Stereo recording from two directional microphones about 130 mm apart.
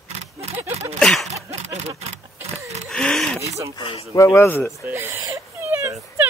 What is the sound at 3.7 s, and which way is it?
Speech, 45° left (ahead or behind).